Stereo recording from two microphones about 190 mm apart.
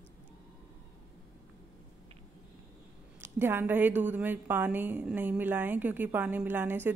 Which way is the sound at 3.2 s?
10° right (ahead or behind).